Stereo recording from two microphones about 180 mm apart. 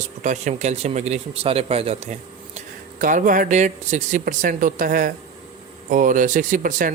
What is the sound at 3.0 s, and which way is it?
Speech, 45° right (ahead or behind).